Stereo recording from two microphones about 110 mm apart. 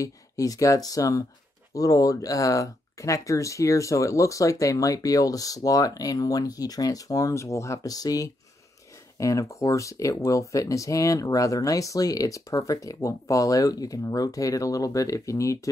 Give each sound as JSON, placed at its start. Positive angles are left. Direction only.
{"t": 0.0, "sound": "speech", "side_deg": 30}